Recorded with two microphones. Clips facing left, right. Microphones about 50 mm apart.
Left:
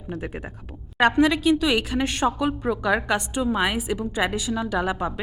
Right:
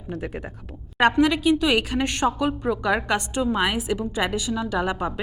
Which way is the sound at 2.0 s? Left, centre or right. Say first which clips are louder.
Even; centre.